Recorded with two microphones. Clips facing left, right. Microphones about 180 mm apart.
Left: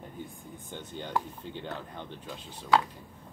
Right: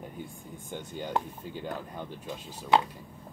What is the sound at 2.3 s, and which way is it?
Speech, 20° right (ahead or behind).